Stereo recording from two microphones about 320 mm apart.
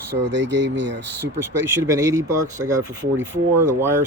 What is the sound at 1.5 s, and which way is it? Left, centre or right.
Speech, right.